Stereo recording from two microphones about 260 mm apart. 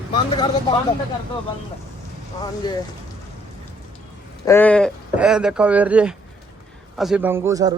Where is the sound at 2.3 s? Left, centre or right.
Centre.